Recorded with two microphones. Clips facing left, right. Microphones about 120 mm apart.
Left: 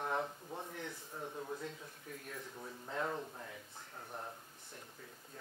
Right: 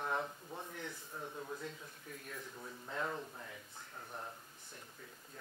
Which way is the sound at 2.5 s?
25° left (ahead or behind).